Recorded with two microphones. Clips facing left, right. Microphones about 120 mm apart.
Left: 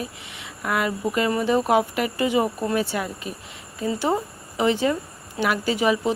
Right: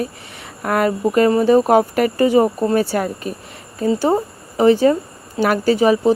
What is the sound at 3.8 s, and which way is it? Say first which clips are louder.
Speech: right 7 dB; 35° right (ahead or behind).